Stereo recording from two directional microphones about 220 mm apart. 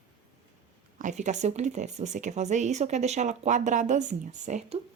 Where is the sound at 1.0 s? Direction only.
35° right (ahead or behind).